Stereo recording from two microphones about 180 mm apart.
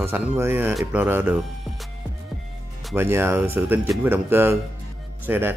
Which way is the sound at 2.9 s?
10° right (ahead or behind).